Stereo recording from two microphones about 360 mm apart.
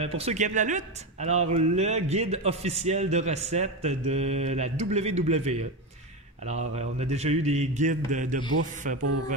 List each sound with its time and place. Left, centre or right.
0.0 s a man's voice: centre